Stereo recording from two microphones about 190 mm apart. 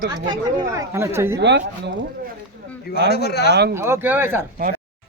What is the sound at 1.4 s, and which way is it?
Speech, 65° right (ahead or behind).